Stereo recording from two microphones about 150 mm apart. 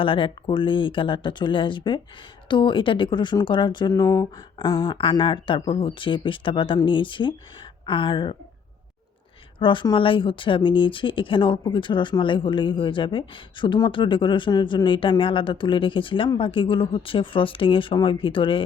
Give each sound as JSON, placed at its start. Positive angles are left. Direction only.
{"t": 0.0, "sound": "speech", "side_deg": 35}
{"t": 9.6, "sound": "speech", "side_deg": 35}